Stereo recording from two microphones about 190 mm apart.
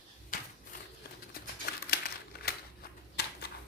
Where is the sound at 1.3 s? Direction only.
55° left (ahead or behind).